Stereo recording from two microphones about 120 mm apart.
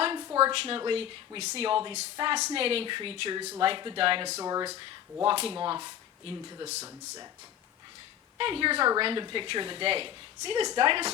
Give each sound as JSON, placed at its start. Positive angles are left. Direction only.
{"t": 0.0, "sound": "a sound", "side_deg": -40}
{"t": 0.5, "sound": "a woman's voice", "side_deg": -50}
{"t": 4.4, "sound": "speech", "side_deg": -30}
{"t": 5.2, "sound": "a woman's voice", "side_deg": -50}
{"t": 8.4, "sound": "a woman's voice", "side_deg": -50}